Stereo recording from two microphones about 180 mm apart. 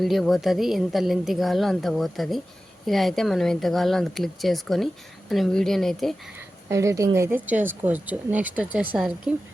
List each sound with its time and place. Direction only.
0.0 s a woman's voice: centre (ahead or behind)
6.7 s speech: 15° right (ahead or behind)